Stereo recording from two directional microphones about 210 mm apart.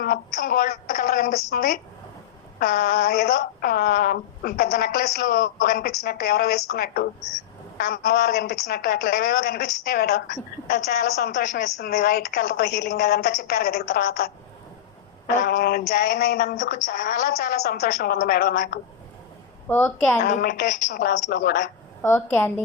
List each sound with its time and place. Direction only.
0.0 s a sound: 45° left (ahead or behind)
2.6 s speech: 40° left (ahead or behind)
10.7 s speech: 35° left (ahead or behind)
15.4 s speech: 45° left (ahead or behind)
19.6 s a woman's voice: 10° left (ahead or behind)
20.2 s a woman's voice: 45° left (ahead or behind)
22.0 s a woman's voice: 10° left (ahead or behind)